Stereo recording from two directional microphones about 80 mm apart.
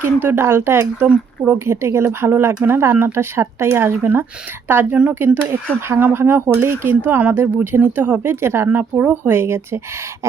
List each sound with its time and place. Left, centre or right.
0.2 s speech: right
1.0 s speech: centre
1.5 s speech: right